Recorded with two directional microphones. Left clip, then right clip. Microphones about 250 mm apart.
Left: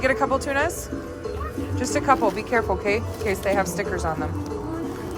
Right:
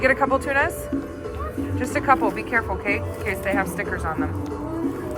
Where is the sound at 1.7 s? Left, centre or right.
Centre.